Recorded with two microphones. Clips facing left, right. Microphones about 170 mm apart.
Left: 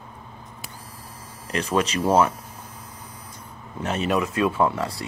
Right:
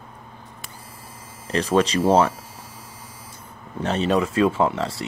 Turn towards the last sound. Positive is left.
turn(degrees=-25)  # may be behind; listen again after turning